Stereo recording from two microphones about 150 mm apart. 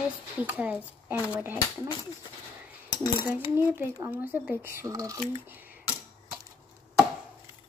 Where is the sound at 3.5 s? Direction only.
15° right (ahead or behind).